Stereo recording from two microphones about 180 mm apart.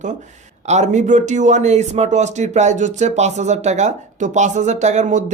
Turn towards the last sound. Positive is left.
turn(degrees=-40)  # may be behind; listen again after turning